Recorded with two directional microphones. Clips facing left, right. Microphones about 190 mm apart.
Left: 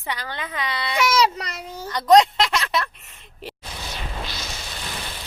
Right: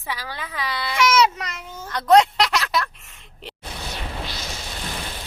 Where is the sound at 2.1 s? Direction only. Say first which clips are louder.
Even; centre (ahead or behind).